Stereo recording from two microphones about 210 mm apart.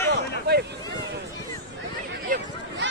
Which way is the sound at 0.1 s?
50° right (ahead or behind).